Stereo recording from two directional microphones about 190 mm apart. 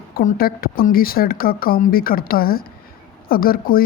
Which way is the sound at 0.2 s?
50° left (ahead or behind).